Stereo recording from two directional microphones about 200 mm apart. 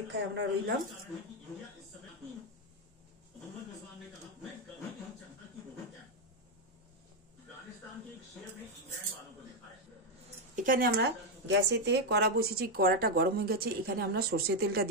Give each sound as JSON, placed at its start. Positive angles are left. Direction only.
{"t": 0.1, "sound": "speech", "side_deg": -60}
{"t": 10.5, "sound": "a woman's voice", "side_deg": -40}